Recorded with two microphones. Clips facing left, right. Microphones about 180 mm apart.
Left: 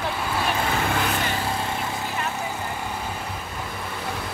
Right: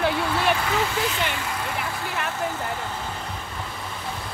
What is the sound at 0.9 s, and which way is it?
Vehicle, 55° left (ahead or behind).